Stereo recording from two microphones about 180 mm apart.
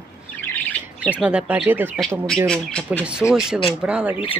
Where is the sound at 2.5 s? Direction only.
5° left (ahead or behind).